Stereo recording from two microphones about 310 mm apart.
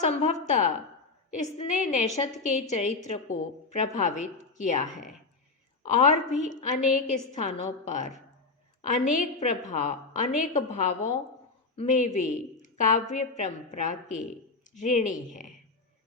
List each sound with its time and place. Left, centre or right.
0.0 s a woman's voice: left